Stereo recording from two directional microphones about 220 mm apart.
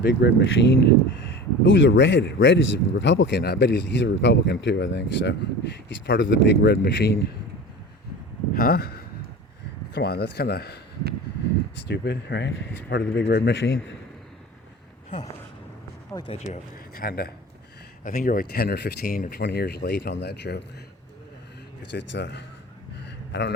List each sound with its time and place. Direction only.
0.0 s speech: 50° left (ahead or behind)
8.5 s speech: 45° left (ahead or behind)
11.9 s speech: 50° left (ahead or behind)
16.9 s speech: 40° left (ahead or behind)
21.9 s speech: 55° left (ahead or behind)
23.0 s a sound: 50° left (ahead or behind)